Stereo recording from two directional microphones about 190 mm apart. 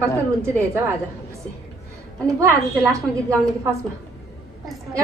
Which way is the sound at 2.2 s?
15° right (ahead or behind).